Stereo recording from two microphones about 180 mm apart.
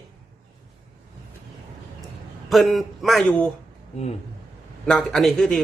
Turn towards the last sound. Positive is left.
turn(degrees=0)  # may be behind; listen again after turning